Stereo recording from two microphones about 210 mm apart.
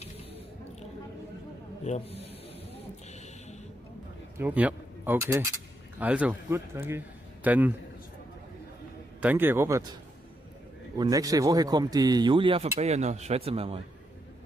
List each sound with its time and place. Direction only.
1.9 s a man's voice: 30° left (ahead or behind)
2.7 s a sound: 30° left (ahead or behind)
4.4 s a man's voice: 5° right (ahead or behind)
9.2 s a man's voice: 10° right (ahead or behind)
11.0 s speech: 15° right (ahead or behind)